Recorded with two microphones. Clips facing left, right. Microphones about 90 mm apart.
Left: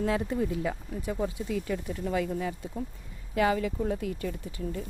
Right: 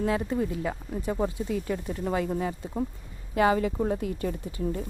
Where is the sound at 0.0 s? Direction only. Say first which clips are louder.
Right 1 dB; 20° right (ahead or behind).